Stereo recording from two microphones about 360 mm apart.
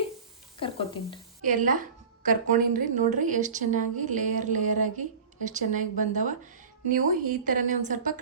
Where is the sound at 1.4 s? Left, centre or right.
Right.